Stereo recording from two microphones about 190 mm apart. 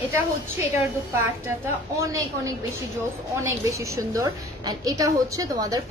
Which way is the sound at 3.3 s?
15° right (ahead or behind).